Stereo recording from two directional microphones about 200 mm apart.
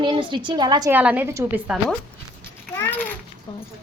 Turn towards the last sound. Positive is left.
turn(degrees=10)  # may be behind; listen again after turning